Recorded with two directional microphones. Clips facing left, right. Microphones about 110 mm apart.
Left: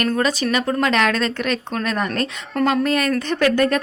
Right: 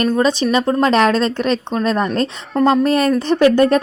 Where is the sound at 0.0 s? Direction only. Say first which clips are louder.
Right 4 dB; 30° right (ahead or behind).